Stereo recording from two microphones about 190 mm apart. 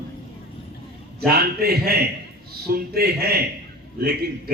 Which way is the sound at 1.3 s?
55° right (ahead or behind).